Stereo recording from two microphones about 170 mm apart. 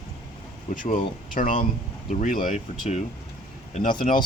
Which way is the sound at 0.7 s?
50° left (ahead or behind).